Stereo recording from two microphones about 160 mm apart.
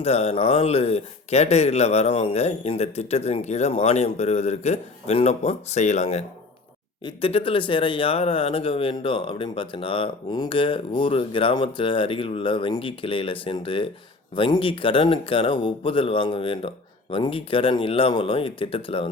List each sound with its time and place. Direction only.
0.0 s speech: 40° left (ahead or behind)